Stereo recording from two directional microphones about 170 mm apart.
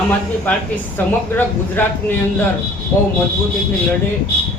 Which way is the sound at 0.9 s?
10° left (ahead or behind).